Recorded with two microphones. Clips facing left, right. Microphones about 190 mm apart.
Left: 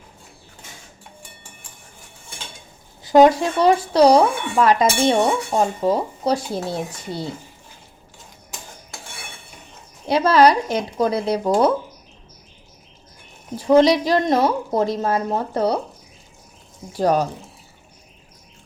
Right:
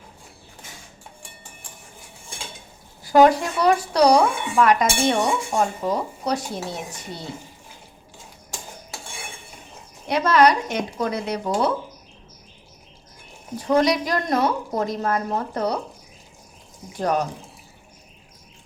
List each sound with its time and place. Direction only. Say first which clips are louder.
3.0 s speech: left 2 dB; 20° left (ahead or behind)
10.1 s speech: left 3 dB; 30° left (ahead or behind)
13.7 s speech: left 5 dB; 25° left (ahead or behind)
16.9 s speech: left 4 dB; 30° left (ahead or behind)